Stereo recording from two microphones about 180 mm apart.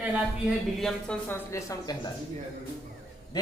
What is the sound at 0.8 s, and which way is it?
Speech, centre (ahead or behind).